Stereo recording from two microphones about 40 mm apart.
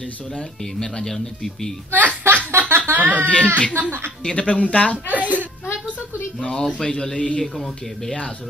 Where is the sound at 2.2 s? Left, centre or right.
Right.